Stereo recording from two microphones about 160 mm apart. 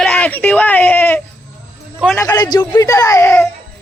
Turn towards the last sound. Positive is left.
turn(degrees=15)  # may be behind; listen again after turning